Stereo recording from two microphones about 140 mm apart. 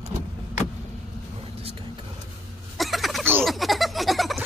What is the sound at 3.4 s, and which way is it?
Baby laughter, centre (ahead or behind).